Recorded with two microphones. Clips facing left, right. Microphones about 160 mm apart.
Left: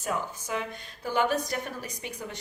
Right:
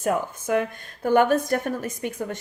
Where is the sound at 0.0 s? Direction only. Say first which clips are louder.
Right 7 dB; 55° right (ahead or behind).